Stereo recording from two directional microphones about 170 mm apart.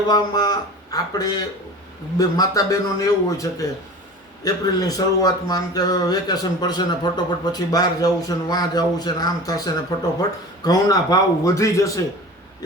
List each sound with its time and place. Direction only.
0.1 s speech: 25° left (ahead or behind)